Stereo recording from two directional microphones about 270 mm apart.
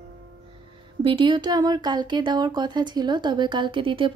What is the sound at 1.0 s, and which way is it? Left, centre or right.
Speech, centre.